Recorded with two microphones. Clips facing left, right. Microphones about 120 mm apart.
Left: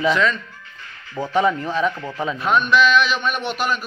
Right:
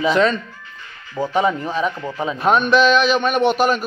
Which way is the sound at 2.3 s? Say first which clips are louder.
Right 3 dB; 45° right (ahead or behind).